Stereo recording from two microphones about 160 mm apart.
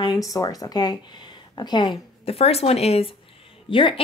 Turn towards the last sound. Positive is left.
turn(degrees=35)  # may be behind; listen again after turning